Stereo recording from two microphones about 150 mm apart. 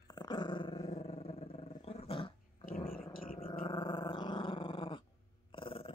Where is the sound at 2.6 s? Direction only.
70° left (ahead or behind).